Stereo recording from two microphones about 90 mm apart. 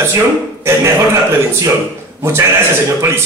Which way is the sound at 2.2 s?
30° right (ahead or behind).